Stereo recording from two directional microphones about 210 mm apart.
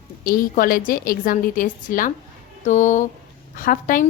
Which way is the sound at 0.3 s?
40° left (ahead or behind).